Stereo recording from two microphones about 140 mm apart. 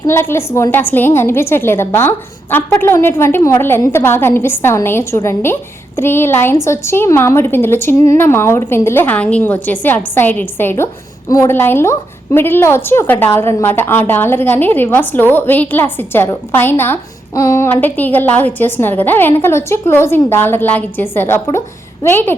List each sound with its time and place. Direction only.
0.0 s a woman's voice: 15° left (ahead or behind)